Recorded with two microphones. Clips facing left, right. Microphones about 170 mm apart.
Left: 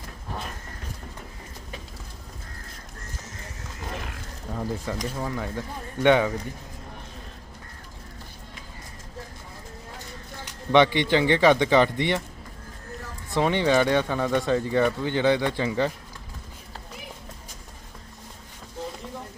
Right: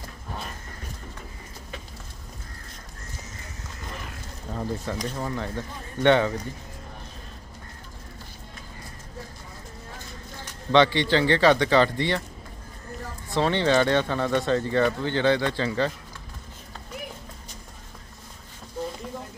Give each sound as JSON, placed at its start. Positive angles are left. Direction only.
{"t": 4.5, "sound": "speech", "side_deg": 5}
{"t": 10.4, "sound": "speech", "side_deg": 15}
{"t": 13.3, "sound": "speech", "side_deg": 15}